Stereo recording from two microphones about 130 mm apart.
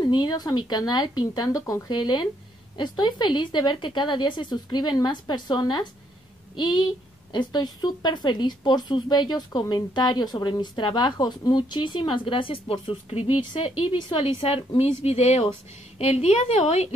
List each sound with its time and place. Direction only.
0.0 s a woman's voice: 35° left (ahead or behind); by 16.9 s 55° left (ahead or behind)